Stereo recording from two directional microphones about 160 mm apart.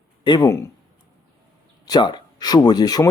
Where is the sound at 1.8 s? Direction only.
25° left (ahead or behind).